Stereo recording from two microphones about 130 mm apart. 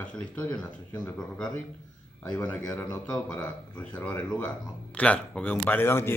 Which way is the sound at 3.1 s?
10° left (ahead or behind).